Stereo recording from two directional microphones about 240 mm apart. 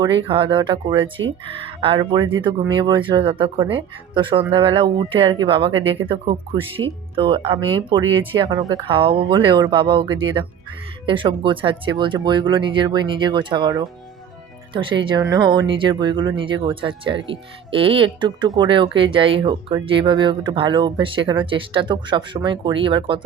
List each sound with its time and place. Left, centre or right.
0.3 s speech: right